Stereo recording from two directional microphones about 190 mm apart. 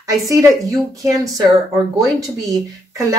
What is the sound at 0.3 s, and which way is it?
Speech, 15° right (ahead or behind).